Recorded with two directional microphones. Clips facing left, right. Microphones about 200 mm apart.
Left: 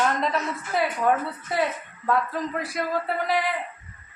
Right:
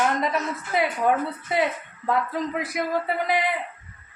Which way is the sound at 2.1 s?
15° right (ahead or behind).